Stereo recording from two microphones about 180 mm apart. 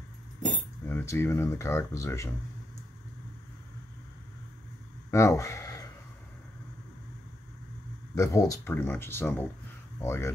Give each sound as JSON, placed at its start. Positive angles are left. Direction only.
{"t": 0.8, "sound": "speech", "side_deg": 15}
{"t": 5.1, "sound": "speech", "side_deg": 15}
{"t": 8.1, "sound": "speech", "side_deg": 15}